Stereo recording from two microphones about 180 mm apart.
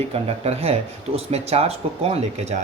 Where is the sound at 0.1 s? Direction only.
35° right (ahead or behind).